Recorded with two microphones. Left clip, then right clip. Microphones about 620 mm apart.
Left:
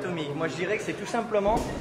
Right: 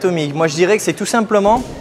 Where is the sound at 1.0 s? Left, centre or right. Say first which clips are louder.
Right 13 dB; right.